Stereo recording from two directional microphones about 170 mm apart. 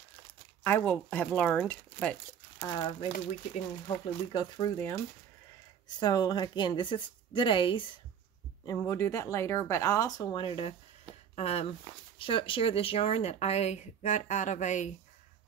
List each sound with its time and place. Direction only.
0.7 s speech: 10° left (ahead or behind)
2.6 s speech: 25° left (ahead or behind)
5.9 s speech: 25° left (ahead or behind)
8.6 s speech: 15° left (ahead or behind); by 14.9 s 45° left (ahead or behind)